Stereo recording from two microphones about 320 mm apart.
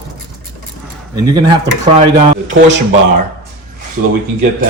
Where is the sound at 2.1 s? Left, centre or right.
Right.